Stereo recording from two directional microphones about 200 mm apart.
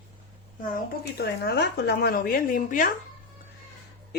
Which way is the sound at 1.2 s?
55° left (ahead or behind).